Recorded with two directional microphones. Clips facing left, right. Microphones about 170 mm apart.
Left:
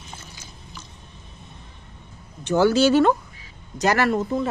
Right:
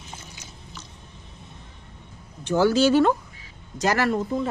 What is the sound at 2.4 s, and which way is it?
Speech, 70° left (ahead or behind).